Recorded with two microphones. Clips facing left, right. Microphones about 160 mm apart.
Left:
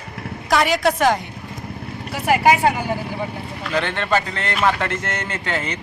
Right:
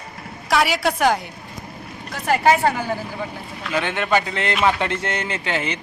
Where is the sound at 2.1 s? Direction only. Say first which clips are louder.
Left 1 dB; 10° left (ahead or behind).